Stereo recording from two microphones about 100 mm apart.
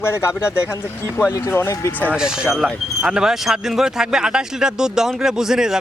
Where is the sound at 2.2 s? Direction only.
5° right (ahead or behind).